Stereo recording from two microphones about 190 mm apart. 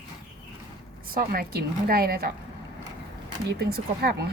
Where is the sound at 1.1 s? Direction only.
50° right (ahead or behind).